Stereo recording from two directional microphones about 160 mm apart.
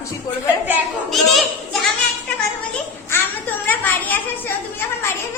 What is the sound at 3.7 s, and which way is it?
Speech, 10° left (ahead or behind).